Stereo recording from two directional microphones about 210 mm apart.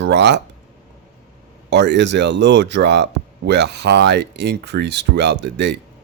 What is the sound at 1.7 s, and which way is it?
Speech, 55° right (ahead or behind).